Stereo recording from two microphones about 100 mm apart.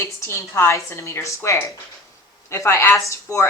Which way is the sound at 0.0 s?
25° left (ahead or behind).